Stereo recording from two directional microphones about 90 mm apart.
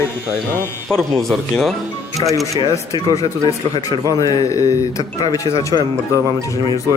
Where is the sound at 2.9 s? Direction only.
55° left (ahead or behind).